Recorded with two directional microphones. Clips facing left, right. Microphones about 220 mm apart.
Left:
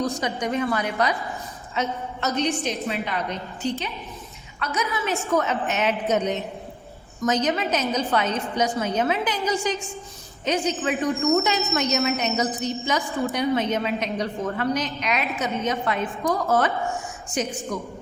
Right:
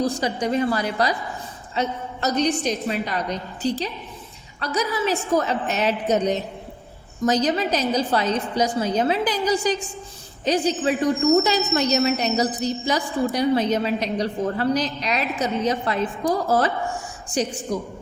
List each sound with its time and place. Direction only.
0.0 s a woman's voice: 30° right (ahead or behind)